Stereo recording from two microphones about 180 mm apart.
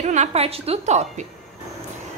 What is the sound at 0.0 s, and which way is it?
A woman's voice, 40° right (ahead or behind).